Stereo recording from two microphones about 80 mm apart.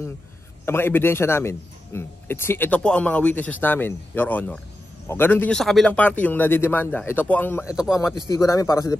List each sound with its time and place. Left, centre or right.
0.7 s a man's voice: left
2.8 s a man's voice: centre
5.5 s speech: centre
5.9 s a man's voice: centre
7.6 s a man's voice: centre
8.3 s a man's voice: left